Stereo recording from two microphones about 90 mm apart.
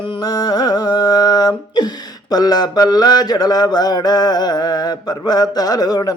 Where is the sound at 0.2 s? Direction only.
45° left (ahead or behind).